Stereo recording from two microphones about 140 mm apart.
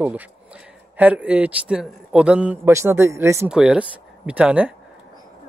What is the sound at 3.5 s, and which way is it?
Speech, 5° right (ahead or behind).